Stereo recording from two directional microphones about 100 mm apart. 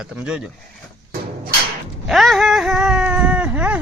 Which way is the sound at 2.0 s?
Centre (ahead or behind).